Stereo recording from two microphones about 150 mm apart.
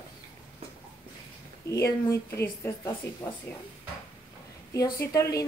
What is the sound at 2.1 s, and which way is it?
A woman's voice, 15° left (ahead or behind).